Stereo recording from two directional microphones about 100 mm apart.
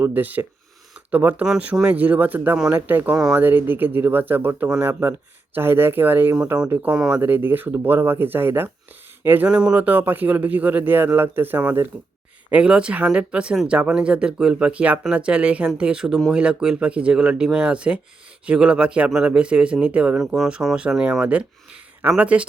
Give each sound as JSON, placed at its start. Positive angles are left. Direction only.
{"t": 0.0, "sound": "speech", "side_deg": -15}
{"t": 3.2, "sound": "speech", "side_deg": -5}
{"t": 3.4, "sound": "speech", "side_deg": -20}
{"t": 6.9, "sound": "speech", "side_deg": -10}
{"t": 7.2, "sound": "speech", "side_deg": -20}
{"t": 9.5, "sound": "speech", "side_deg": -10}
{"t": 20.1, "sound": "speech", "side_deg": 0}